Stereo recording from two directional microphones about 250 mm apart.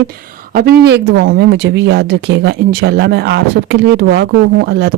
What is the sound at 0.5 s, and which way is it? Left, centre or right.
Speech, right.